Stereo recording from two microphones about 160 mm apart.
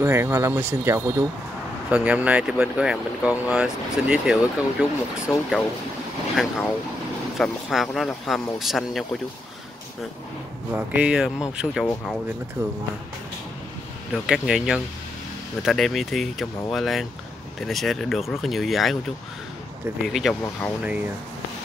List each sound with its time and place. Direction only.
0.0 s speech: 15° right (ahead or behind)
10.7 s speech: 10° right (ahead or behind)
14.1 s speech: 5° right (ahead or behind)